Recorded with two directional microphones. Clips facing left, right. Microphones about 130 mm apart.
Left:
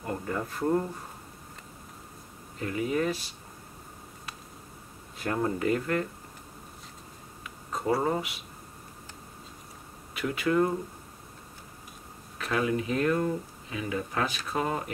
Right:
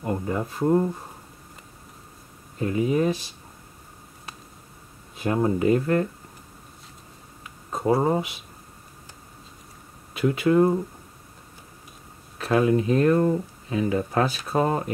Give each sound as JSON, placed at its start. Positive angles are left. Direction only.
{"t": 0.0, "sound": "speech", "side_deg": -20}
{"t": 2.6, "sound": "speech", "side_deg": -25}
{"t": 5.2, "sound": "speech", "side_deg": -15}
{"t": 7.7, "sound": "speech", "side_deg": -25}
{"t": 10.1, "sound": "speech", "side_deg": -30}
{"t": 12.4, "sound": "speech", "side_deg": -35}